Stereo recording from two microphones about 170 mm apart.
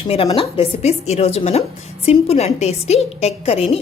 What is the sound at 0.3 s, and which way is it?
A woman's voice, 30° left (ahead or behind).